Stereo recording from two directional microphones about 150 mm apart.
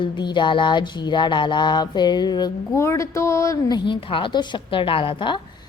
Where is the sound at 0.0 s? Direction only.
30° left (ahead or behind).